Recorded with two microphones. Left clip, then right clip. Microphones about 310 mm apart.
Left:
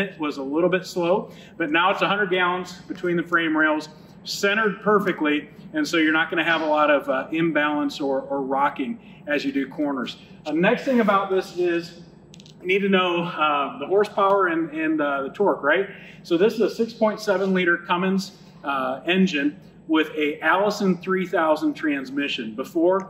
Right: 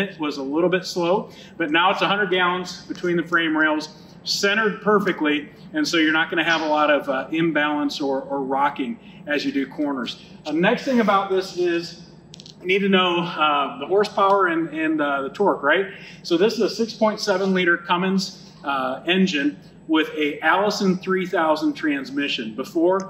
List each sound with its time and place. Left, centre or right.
0.0 s a man's voice: centre